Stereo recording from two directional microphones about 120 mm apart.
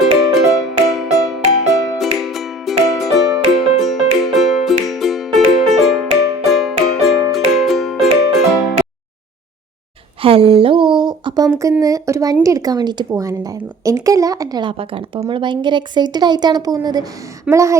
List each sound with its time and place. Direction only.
0.3 s music: centre (ahead or behind)
10.2 s a sound: 50° right (ahead or behind); by 11.7 s 30° right (ahead or behind)
11.8 s a woman's voice: 30° right (ahead or behind)